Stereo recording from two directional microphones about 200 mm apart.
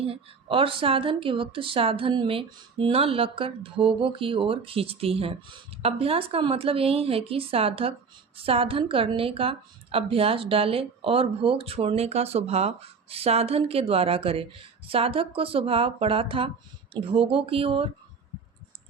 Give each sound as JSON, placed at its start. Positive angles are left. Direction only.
{"t": 0.0, "sound": "a woman's voice", "side_deg": -25}